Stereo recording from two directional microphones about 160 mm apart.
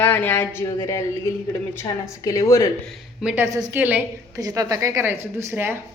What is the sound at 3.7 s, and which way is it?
Speech, 10° right (ahead or behind).